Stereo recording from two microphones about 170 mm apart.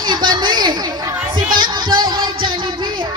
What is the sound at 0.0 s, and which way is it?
Chatter, 25° right (ahead or behind).